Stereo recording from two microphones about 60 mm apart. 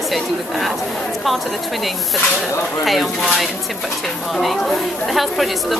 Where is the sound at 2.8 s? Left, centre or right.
Centre.